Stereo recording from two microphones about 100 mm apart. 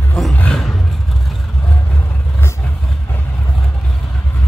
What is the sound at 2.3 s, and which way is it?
Vehicle, 25° left (ahead or behind).